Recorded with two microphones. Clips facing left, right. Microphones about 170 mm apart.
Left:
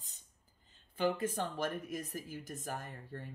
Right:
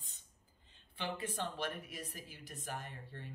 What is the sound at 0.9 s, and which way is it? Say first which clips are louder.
Speech: left 7 dB; 45° left (ahead or behind).